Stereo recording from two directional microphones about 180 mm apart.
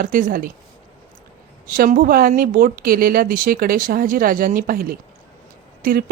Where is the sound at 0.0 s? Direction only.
50° right (ahead or behind).